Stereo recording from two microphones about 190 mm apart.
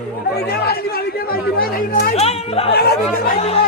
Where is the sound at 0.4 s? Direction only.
55° left (ahead or behind).